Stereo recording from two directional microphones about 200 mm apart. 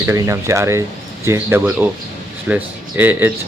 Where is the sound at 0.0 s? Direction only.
15° right (ahead or behind).